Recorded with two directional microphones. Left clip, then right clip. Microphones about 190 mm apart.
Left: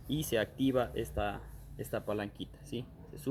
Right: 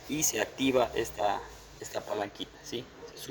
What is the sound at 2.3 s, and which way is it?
Speech, 30° right (ahead or behind).